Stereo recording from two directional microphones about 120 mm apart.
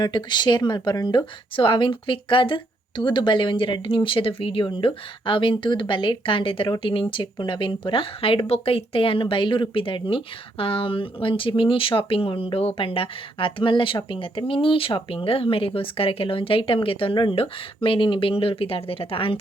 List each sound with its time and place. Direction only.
0.0 s speech: 40° left (ahead or behind)